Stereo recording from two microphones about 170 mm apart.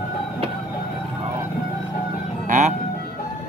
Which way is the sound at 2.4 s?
50° right (ahead or behind).